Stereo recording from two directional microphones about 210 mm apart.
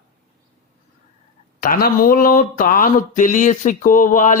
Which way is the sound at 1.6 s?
45° left (ahead or behind).